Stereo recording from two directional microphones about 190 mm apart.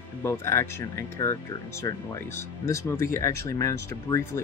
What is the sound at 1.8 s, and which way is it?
Speech, 15° left (ahead or behind).